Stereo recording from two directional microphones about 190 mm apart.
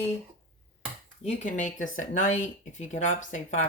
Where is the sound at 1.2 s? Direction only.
40° left (ahead or behind).